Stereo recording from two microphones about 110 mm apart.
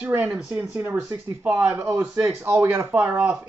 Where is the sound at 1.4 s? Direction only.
15° right (ahead or behind).